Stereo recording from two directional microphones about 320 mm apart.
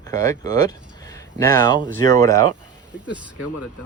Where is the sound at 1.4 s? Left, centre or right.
Centre.